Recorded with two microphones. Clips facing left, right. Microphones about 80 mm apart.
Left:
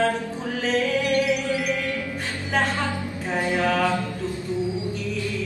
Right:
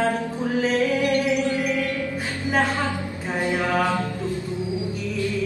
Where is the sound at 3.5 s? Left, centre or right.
Right.